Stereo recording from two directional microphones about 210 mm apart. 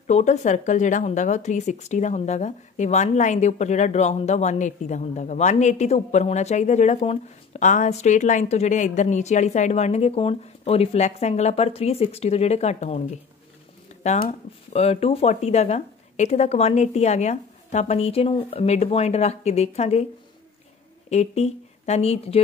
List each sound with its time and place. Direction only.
0.0 s speech: 35° left (ahead or behind)
21.1 s speech: 30° left (ahead or behind)